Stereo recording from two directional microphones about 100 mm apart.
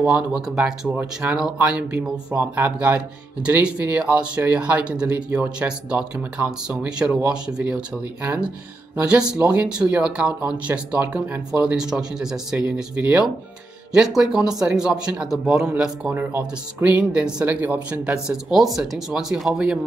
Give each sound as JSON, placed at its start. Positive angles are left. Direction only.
{"t": 0.0, "sound": "speech", "side_deg": -10}